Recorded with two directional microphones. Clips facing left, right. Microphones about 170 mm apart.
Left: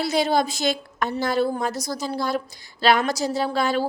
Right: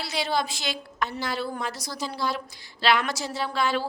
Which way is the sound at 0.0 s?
45° left (ahead or behind).